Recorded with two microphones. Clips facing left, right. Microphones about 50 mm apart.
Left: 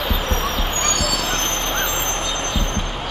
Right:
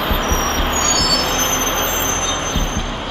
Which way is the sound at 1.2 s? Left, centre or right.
Right.